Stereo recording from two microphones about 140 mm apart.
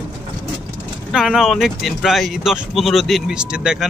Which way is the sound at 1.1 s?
5° right (ahead or behind).